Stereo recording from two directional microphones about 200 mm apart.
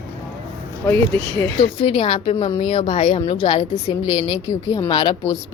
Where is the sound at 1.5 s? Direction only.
30° left (ahead or behind).